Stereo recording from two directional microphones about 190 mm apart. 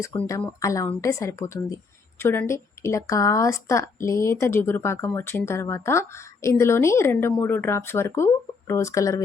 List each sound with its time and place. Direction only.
0.3 s speech: 15° left (ahead or behind)